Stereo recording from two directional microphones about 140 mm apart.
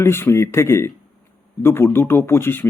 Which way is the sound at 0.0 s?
15° left (ahead or behind).